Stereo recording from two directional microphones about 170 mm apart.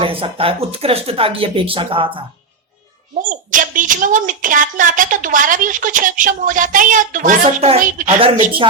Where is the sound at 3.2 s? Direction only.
50° right (ahead or behind).